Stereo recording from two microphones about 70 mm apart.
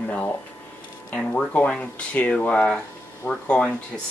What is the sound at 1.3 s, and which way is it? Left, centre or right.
Speech, centre.